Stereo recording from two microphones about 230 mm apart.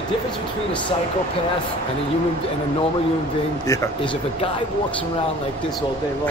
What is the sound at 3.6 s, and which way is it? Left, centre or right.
Speech, centre.